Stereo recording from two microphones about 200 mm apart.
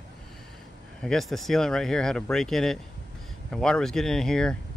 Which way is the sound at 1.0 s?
Centre (ahead or behind).